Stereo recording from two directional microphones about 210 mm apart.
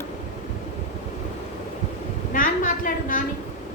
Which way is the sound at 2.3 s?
40° left (ahead or behind).